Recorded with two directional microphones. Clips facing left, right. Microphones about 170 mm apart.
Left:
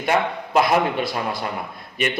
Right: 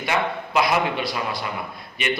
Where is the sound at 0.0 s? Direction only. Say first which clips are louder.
Left 3 dB; 45° left (ahead or behind).